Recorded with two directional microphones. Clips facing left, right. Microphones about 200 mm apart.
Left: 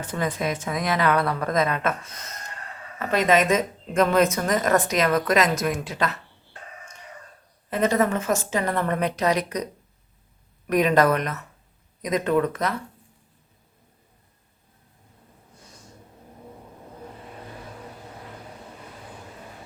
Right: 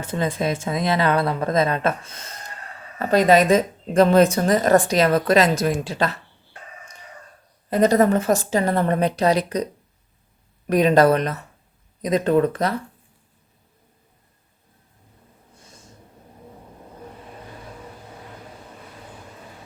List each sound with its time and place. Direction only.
0.1 s a woman's voice: 25° right (ahead or behind)
7.7 s a woman's voice: 35° right (ahead or behind)
10.7 s a woman's voice: 30° right (ahead or behind)